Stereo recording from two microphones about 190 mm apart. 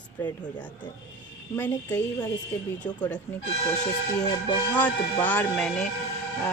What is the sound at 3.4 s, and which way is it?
Speech, 40° left (ahead or behind).